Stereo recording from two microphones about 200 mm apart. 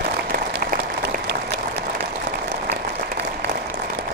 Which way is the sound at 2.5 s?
55° right (ahead or behind).